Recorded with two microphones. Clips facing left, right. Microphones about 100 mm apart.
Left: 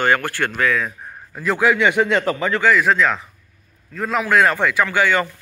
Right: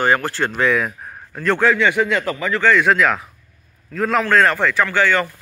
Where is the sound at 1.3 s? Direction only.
5° left (ahead or behind).